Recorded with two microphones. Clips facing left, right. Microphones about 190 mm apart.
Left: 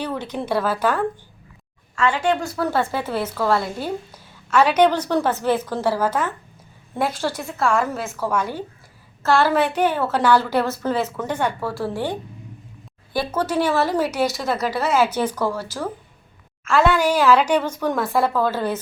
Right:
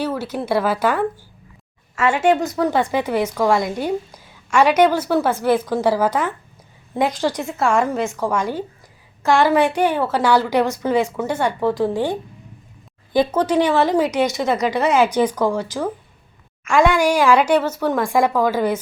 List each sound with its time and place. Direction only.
0.0 s a woman's voice: 5° right (ahead or behind)
2.0 s a woman's voice: 25° right (ahead or behind)
7.6 s speech: centre (ahead or behind)
9.2 s a woman's voice: 15° right (ahead or behind)
13.1 s a woman's voice: 15° right (ahead or behind)
14.1 s speech: 5° left (ahead or behind)
15.2 s a woman's voice: 15° right (ahead or behind)